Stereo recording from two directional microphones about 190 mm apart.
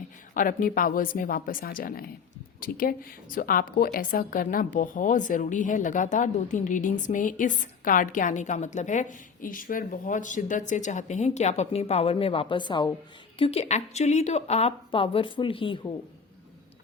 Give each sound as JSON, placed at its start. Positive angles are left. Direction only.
{"t": 0.3, "sound": "a woman's voice", "side_deg": 45}